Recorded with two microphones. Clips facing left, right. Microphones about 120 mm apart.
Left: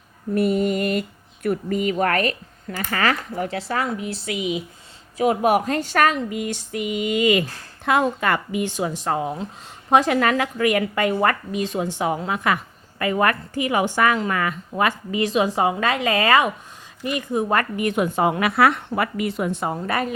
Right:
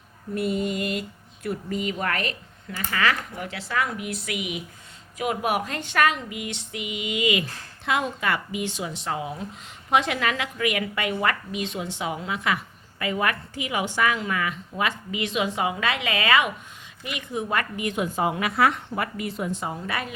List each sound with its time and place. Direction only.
0.3 s a woman's voice: 55° left (ahead or behind)